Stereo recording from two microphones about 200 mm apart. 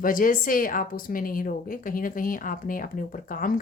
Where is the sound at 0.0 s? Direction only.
45° left (ahead or behind).